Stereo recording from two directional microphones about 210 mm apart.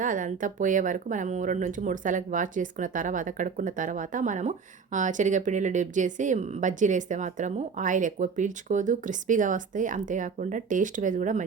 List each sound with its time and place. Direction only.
0.0 s speech: 40° right (ahead or behind)